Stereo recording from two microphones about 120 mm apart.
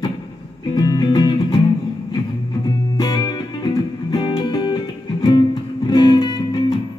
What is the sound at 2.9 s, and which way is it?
Music, 35° left (ahead or behind).